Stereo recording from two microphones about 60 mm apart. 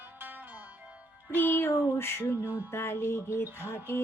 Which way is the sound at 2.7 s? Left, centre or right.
Left.